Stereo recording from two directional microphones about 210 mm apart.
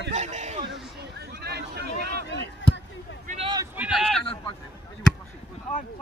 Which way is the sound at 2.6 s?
60° left (ahead or behind).